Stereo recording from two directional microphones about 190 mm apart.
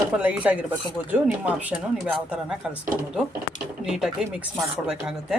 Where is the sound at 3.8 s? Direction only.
5° right (ahead or behind).